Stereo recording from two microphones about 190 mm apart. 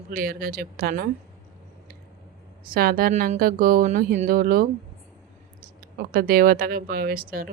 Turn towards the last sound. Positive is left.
turn(degrees=-50)  # may be behind; listen again after turning